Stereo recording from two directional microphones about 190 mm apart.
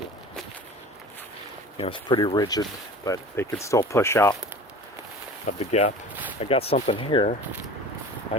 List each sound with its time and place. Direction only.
1.8 s speech: 25° left (ahead or behind)
5.5 s speech: 40° left (ahead or behind)